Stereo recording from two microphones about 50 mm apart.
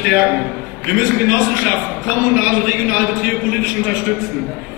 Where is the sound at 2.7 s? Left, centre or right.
Right.